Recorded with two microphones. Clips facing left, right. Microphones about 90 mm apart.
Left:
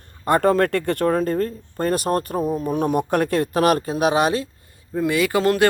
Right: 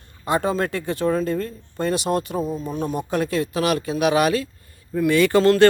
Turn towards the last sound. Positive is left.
turn(degrees=15)  # may be behind; listen again after turning